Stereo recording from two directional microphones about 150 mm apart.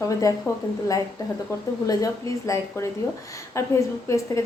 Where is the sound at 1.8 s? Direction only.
20° left (ahead or behind).